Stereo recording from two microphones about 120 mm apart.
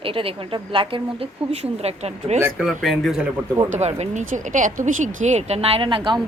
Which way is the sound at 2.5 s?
Centre (ahead or behind).